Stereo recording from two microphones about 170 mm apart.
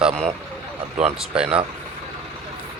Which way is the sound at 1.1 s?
5° right (ahead or behind).